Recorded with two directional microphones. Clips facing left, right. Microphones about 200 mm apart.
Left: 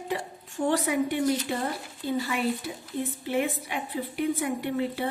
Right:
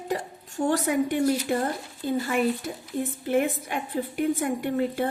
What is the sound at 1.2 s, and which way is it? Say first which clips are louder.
Speech: right 2 dB; 10° right (ahead or behind).